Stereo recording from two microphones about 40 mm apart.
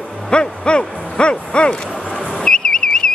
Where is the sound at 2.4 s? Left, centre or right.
Centre.